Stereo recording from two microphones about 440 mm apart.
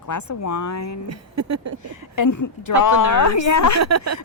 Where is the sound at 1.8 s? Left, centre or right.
Left.